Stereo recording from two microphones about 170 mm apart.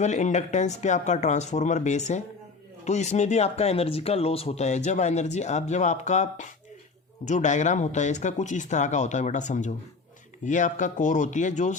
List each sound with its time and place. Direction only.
0.0 s speech: 45° left (ahead or behind)